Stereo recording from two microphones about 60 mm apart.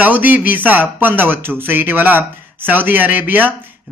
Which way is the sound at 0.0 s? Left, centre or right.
Right.